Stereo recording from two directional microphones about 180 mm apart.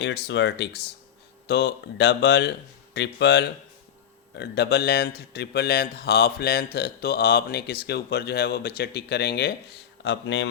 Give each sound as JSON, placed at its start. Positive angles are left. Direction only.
{"t": 0.0, "sound": "speech", "side_deg": 75}
{"t": 10.0, "sound": "speech", "side_deg": 80}